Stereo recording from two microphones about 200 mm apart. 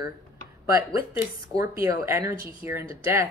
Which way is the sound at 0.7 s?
15° right (ahead or behind).